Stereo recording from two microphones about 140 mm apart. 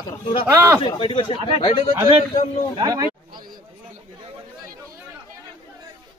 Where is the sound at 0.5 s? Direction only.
20° right (ahead or behind).